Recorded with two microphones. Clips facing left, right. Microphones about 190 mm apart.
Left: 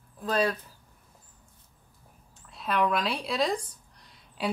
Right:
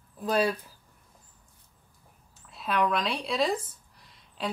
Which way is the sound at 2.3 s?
Centre (ahead or behind).